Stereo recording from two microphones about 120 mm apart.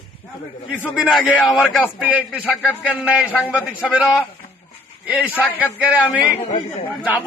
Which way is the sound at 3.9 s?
5° right (ahead or behind).